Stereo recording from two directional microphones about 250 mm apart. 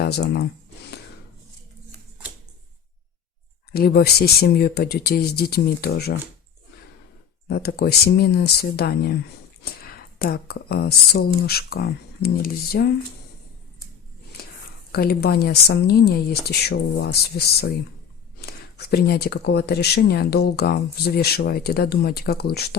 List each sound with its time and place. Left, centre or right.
0.0 s speech: left
3.7 s speech: left
7.4 s speech: left
14.9 s speech: left